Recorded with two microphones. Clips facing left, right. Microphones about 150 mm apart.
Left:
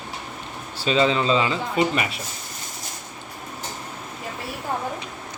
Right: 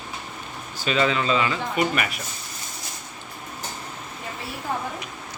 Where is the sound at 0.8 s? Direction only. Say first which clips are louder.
Left 3 dB; 30° left (ahead or behind).